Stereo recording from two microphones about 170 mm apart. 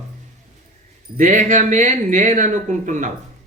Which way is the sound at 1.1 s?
45° right (ahead or behind).